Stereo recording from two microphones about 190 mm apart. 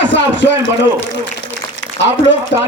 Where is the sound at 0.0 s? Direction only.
70° left (ahead or behind).